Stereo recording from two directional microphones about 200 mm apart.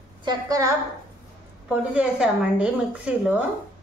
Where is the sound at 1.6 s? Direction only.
5° right (ahead or behind).